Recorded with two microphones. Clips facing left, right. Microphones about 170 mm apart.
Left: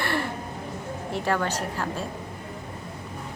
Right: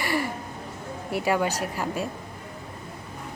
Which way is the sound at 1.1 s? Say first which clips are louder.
Right 2 dB; 10° right (ahead or behind).